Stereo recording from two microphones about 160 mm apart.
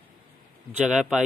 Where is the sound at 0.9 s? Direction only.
5° right (ahead or behind).